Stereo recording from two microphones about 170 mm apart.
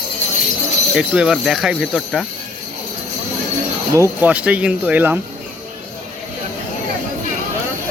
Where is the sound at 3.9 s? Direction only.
15° right (ahead or behind).